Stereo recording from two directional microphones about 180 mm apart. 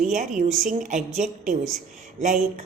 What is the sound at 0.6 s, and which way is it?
Speech, 45° right (ahead or behind).